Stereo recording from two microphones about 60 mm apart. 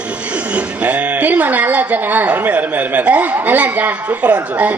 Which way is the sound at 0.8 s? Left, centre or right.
Right.